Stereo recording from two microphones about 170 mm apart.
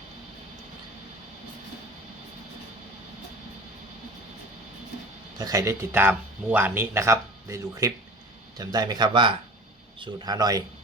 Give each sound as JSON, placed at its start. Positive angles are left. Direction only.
{"t": 5.4, "sound": "speech", "side_deg": -20}